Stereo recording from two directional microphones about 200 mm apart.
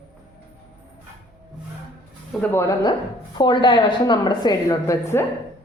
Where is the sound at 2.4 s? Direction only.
10° left (ahead or behind).